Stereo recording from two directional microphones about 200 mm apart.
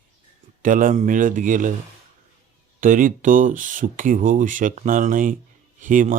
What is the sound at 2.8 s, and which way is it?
Speech, 40° right (ahead or behind).